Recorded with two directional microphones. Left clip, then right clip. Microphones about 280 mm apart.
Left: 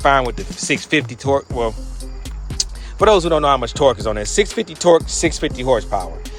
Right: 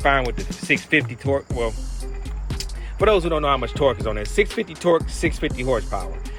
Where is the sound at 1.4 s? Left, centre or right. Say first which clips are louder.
Left 4 dB; centre.